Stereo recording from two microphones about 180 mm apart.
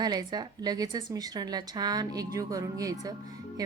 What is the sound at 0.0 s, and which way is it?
Speech, 20° right (ahead or behind).